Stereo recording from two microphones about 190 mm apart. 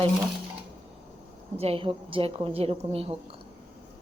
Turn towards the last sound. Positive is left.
turn(degrees=-30)  # may be behind; listen again after turning